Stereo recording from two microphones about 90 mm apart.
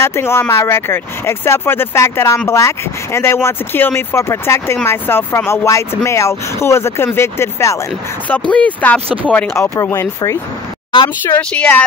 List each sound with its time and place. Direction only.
0.0 s speech: 30° left (ahead or behind)
8.3 s speech: 15° left (ahead or behind)
9.6 s speech: 30° left (ahead or behind)
11.3 s speech: 20° left (ahead or behind)